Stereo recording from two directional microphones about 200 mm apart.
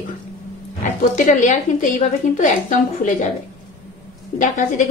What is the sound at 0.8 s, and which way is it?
A woman's voice, 35° left (ahead or behind).